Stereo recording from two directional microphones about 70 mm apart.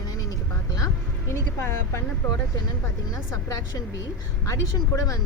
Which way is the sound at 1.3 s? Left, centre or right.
Left.